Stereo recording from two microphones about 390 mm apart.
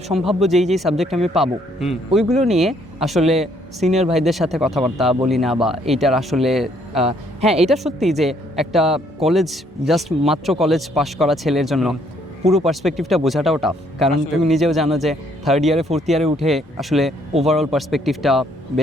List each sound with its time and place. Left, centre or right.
0.1 s speech: centre
7.0 s speech: centre
7.7 s speech: centre